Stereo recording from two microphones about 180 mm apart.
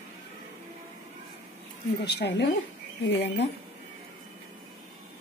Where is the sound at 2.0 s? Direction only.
65° left (ahead or behind).